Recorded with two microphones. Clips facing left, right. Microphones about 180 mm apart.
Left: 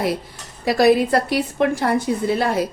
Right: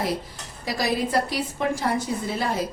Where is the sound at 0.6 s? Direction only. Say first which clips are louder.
Left 10 dB; 60° left (ahead or behind).